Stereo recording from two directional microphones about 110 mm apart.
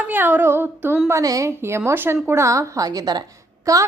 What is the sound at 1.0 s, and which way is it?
A woman's voice, 30° right (ahead or behind).